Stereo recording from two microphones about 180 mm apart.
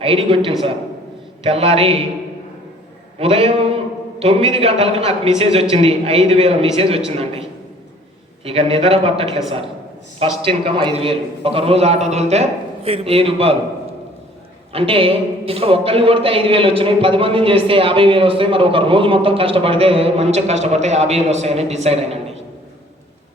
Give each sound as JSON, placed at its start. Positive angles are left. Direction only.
{"t": 0.0, "sound": "a woman's voice", "side_deg": -35}
{"t": 3.2, "sound": "a woman's voice", "side_deg": -35}
{"t": 8.4, "sound": "a woman's voice", "side_deg": -35}
{"t": 14.7, "sound": "a woman's voice", "side_deg": -30}